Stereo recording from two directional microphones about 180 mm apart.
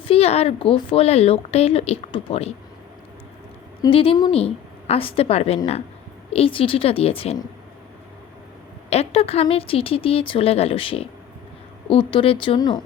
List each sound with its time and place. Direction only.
0.0 s speech: 35° left (ahead or behind)
3.8 s speech: 30° left (ahead or behind)
8.9 s speech: 35° left (ahead or behind)